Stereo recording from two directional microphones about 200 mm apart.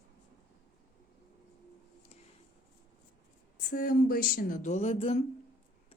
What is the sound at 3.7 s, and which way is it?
Speech, 45° left (ahead or behind).